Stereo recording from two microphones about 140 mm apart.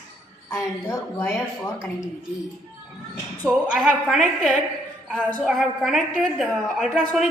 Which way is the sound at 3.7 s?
Centre (ahead or behind).